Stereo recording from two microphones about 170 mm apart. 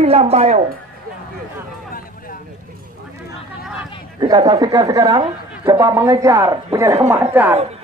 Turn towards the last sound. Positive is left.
turn(degrees=-10)  # may be behind; listen again after turning